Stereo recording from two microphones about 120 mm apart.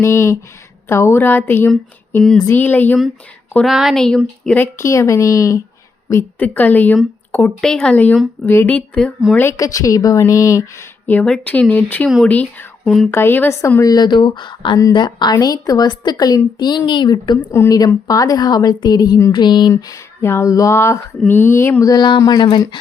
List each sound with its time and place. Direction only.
0.0 s a woman's voice: 25° left (ahead or behind)
3.7 s a woman's voice: centre (ahead or behind)
12.8 s speech: centre (ahead or behind)
13.1 s a woman's voice: 20° left (ahead or behind)
13.9 s a woman's voice: 35° left (ahead or behind)
17.4 s a woman's voice: 20° left (ahead or behind); by 22.6 s 40° left (ahead or behind)